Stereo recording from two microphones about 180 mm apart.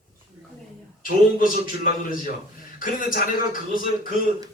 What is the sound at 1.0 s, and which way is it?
A man's voice, 50° left (ahead or behind).